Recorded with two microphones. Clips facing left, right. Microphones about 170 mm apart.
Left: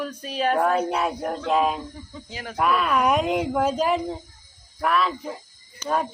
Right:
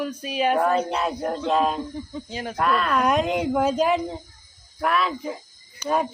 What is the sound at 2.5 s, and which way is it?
Speech, 5° left (ahead or behind).